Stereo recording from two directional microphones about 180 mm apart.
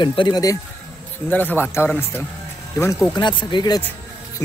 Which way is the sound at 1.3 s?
10° left (ahead or behind).